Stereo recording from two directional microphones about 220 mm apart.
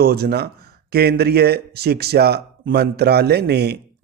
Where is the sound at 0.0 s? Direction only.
45° right (ahead or behind).